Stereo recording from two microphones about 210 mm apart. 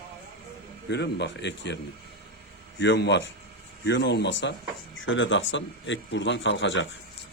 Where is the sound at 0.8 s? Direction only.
55° left (ahead or behind).